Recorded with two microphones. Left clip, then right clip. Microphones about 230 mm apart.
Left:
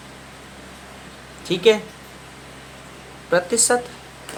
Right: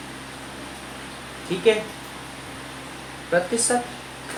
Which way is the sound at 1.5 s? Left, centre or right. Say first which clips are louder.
Left 5 dB; left.